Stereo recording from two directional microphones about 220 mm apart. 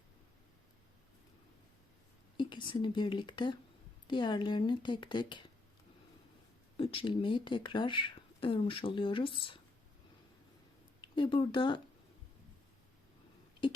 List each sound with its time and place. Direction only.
2.4 s speech: 20° left (ahead or behind)
6.7 s speech: 25° left (ahead or behind)
11.0 s speech: 20° left (ahead or behind)